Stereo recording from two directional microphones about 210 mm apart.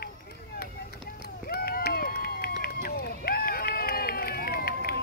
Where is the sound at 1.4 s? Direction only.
45° left (ahead or behind).